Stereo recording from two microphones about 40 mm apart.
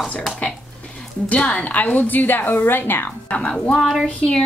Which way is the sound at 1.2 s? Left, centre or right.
Left.